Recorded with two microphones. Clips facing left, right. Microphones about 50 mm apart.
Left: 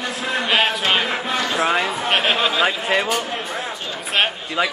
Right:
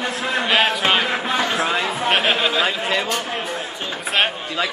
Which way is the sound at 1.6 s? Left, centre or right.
Centre.